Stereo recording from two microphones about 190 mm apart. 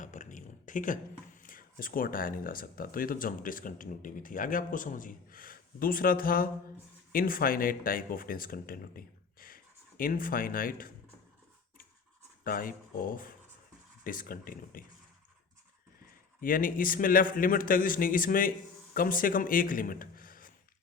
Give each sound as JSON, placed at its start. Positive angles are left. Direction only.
{"t": 0.0, "sound": "a sound", "side_deg": 40}
{"t": 1.4, "sound": "speech", "side_deg": 45}
{"t": 12.5, "sound": "speech", "side_deg": 45}
{"t": 16.4, "sound": "speech", "side_deg": 45}